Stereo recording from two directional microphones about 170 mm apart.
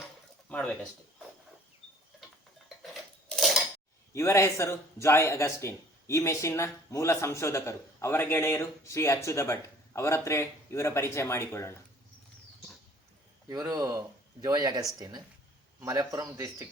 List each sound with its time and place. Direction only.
0.4 s a sound: 10° left (ahead or behind)
2.8 s scissors: centre (ahead or behind)
4.1 s a man's voice: 15° left (ahead or behind)
13.5 s speech: 20° right (ahead or behind)